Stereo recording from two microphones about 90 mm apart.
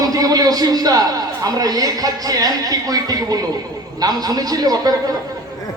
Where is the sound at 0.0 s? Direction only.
40° right (ahead or behind).